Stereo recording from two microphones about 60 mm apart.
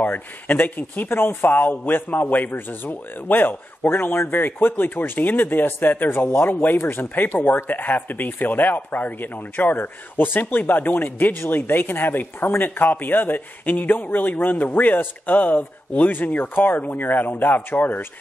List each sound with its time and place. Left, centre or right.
0.0 s speech: left